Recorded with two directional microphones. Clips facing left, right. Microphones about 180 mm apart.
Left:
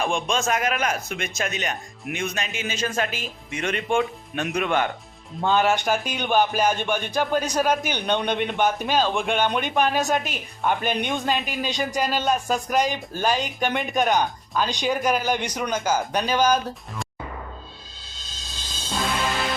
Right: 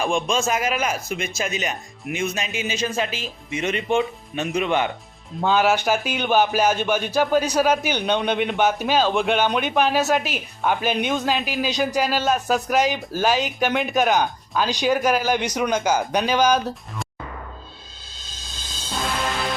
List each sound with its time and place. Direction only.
0.0 s speech: centre (ahead or behind)
3.1 s speech: 50° left (ahead or behind)
3.9 s speech: 5° right (ahead or behind)
18.9 s music: centre (ahead or behind)